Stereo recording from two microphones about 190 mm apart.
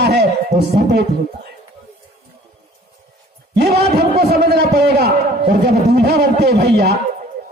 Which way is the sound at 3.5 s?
60° right (ahead or behind).